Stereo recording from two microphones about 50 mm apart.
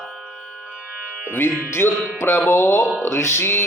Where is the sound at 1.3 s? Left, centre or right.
Left.